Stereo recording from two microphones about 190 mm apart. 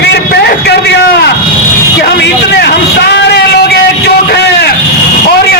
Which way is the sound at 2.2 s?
60° left (ahead or behind).